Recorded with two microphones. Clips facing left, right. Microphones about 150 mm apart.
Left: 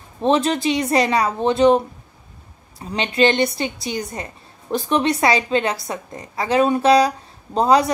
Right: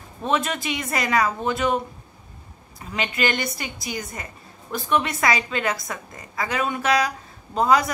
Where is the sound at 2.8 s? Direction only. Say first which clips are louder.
Left 7 dB; 35° left (ahead or behind).